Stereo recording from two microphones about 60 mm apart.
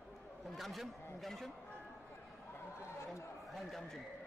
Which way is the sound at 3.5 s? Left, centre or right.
Centre.